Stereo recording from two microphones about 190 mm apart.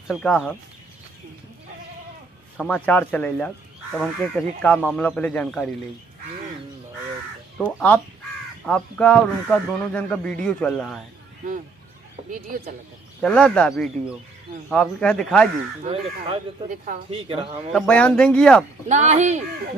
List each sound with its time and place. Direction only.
0.1 s a man's voice: centre (ahead or behind)
2.5 s speech: 5° left (ahead or behind)
8.6 s a man's voice: 5° left (ahead or behind)
12.3 s speech: 45° right (ahead or behind)
13.2 s a man's voice: 5° left (ahead or behind)
15.8 s speech: 30° right (ahead or behind)
17.7 s a man's voice: 5° left (ahead or behind)
18.9 s speech: 40° right (ahead or behind)